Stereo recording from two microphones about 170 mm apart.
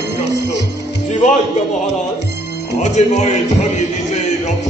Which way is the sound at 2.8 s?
40° left (ahead or behind).